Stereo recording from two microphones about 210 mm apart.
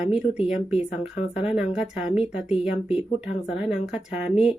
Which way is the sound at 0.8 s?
30° left (ahead or behind).